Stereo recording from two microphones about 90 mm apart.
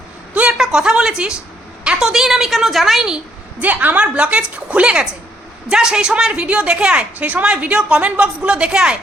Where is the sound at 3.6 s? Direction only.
20° right (ahead or behind).